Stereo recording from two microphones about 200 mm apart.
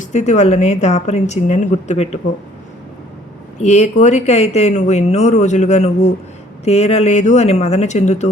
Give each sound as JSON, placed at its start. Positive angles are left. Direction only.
{"t": 0.0, "sound": "speech", "side_deg": 35}
{"t": 3.6, "sound": "speech", "side_deg": 35}